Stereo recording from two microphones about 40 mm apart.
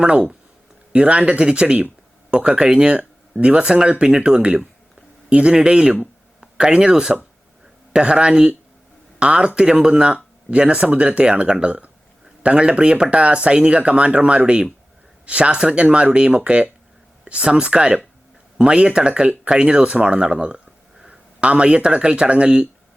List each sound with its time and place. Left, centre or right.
0.0 s speech: right